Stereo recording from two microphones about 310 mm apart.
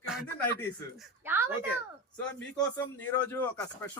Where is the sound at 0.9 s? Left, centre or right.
Centre.